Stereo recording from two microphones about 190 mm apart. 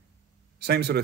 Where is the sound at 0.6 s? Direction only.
60° right (ahead or behind).